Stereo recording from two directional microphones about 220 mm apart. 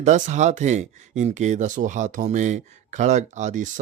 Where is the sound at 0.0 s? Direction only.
30° right (ahead or behind).